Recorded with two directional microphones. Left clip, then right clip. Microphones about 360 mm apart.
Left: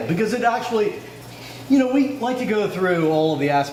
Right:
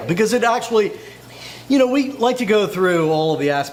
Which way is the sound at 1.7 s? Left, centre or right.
Right.